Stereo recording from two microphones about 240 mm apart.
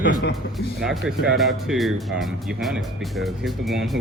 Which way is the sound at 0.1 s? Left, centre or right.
Left.